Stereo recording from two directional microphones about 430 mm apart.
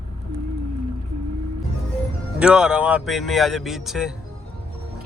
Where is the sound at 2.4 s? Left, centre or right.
Centre.